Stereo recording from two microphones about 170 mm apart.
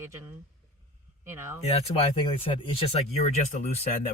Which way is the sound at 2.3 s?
30° left (ahead or behind).